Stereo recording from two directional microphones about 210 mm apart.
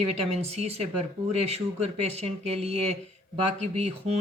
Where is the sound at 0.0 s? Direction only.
30° right (ahead or behind).